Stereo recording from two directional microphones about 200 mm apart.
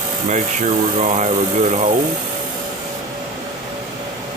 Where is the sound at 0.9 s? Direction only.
35° right (ahead or behind).